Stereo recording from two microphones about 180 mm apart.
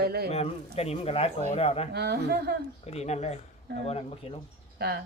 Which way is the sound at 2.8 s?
35° left (ahead or behind).